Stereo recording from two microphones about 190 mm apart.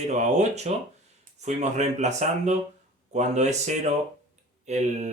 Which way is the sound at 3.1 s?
35° right (ahead or behind).